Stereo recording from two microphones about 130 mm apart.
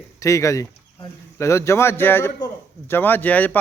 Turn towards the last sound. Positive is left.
turn(degrees=10)  # may be behind; listen again after turning